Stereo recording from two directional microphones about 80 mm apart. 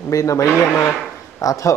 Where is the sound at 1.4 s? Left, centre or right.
Left.